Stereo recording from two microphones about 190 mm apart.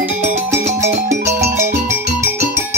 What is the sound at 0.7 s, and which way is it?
Music, 15° right (ahead or behind).